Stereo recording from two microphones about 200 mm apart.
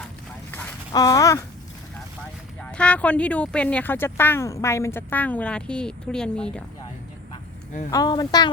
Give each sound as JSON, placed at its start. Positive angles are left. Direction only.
{"t": 0.5, "sound": "a sound", "side_deg": 15}
{"t": 2.6, "sound": "speech", "side_deg": 5}
{"t": 7.9, "sound": "speech", "side_deg": 20}